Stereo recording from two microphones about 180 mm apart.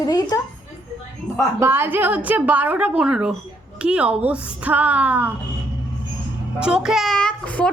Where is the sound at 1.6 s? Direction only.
10° right (ahead or behind).